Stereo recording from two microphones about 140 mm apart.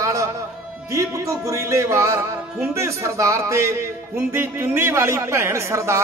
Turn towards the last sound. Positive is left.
turn(degrees=-20)  # may be behind; listen again after turning